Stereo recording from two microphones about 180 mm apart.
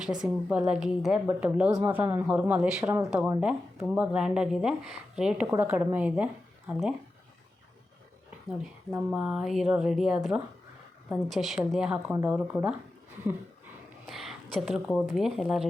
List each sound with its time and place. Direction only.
0.0 s a woman's voice: 5° right (ahead or behind)
1.7 s a woman's voice: 20° right (ahead or behind); by 6.9 s 5° right (ahead or behind)
8.9 s a woman's voice: 5° right (ahead or behind)
14.1 s a woman's voice: centre (ahead or behind)